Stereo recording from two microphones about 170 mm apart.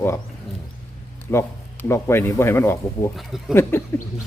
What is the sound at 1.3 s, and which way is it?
Speech, 10° left (ahead or behind).